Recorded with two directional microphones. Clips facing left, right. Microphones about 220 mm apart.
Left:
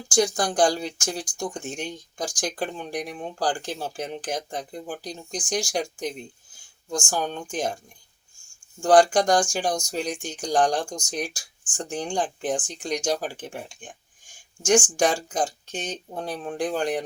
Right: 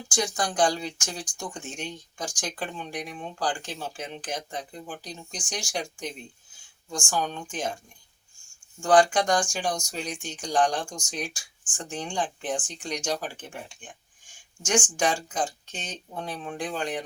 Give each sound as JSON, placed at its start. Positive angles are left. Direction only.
{"t": 0.1, "sound": "speech", "side_deg": 35}
{"t": 8.8, "sound": "speech", "side_deg": 40}